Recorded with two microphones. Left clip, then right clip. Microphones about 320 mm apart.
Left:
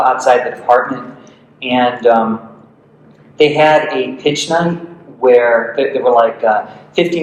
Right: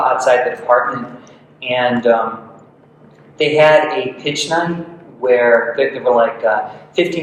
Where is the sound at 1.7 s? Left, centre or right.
Centre.